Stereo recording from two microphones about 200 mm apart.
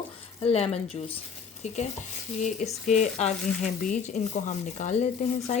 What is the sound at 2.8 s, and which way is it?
Speech, 35° left (ahead or behind).